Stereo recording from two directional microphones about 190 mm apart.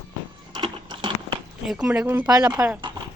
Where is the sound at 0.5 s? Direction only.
25° right (ahead or behind).